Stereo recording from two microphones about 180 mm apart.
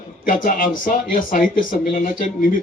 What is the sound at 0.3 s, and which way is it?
Speech, 50° left (ahead or behind).